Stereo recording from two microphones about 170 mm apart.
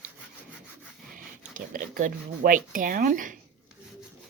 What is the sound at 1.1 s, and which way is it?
Speech, 50° right (ahead or behind).